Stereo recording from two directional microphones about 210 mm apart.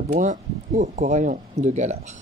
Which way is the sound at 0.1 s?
35° right (ahead or behind).